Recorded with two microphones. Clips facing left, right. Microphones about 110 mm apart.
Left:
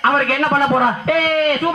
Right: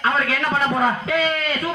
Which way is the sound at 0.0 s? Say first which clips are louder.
Left 5 dB; 55° left (ahead or behind).